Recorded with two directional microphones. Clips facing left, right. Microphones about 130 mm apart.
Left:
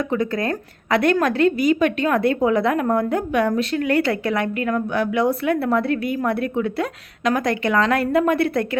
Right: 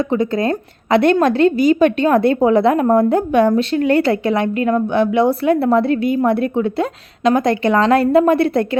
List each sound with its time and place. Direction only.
0.1 s a woman's voice: 25° right (ahead or behind)